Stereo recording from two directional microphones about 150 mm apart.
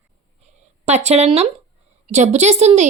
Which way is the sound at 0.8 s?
45° right (ahead or behind).